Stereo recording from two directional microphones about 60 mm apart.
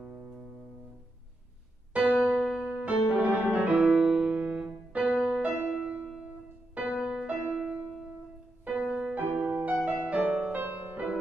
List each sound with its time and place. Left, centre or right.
0.0 s music: centre
2.0 s piano: right
2.8 s music: right